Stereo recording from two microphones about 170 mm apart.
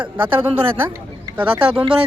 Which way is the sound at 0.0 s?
30° right (ahead or behind).